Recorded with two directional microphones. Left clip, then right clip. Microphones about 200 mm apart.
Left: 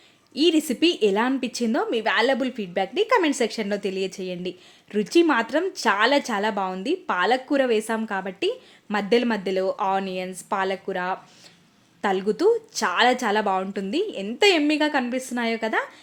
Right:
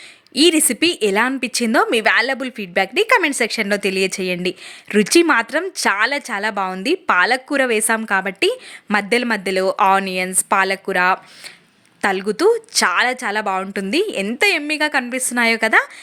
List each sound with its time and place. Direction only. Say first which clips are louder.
0.3 s a woman's voice: right 6 dB; 15° right (ahead or behind)